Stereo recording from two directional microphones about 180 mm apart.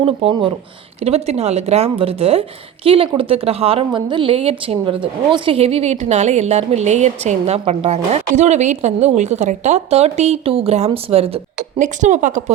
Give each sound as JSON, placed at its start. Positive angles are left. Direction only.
{"t": 0.0, "sound": "speech", "side_deg": -30}